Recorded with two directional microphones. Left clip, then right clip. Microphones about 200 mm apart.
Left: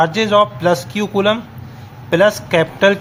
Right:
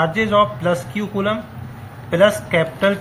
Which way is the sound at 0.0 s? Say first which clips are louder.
Left 3 dB; 45° left (ahead or behind).